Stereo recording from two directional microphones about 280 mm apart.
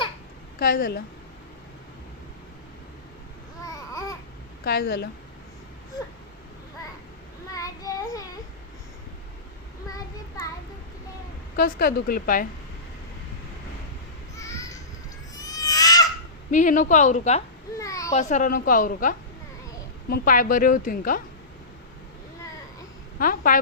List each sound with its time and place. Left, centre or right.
0.6 s a woman's voice: left
3.6 s babbling: centre
4.6 s a woman's voice: left
7.5 s child singing: centre
9.9 s child singing: centre
11.5 s a woman's voice: left
14.3 s a sound: centre
16.5 s a woman's voice: left
17.7 s a sound: centre
18.1 s a woman's voice: left
23.1 s a woman's voice: left